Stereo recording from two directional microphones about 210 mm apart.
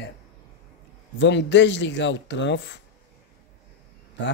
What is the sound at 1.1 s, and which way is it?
Speech, 55° left (ahead or behind).